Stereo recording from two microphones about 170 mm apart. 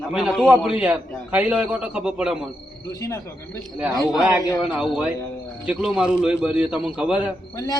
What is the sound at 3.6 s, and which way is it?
Speech, centre (ahead or behind).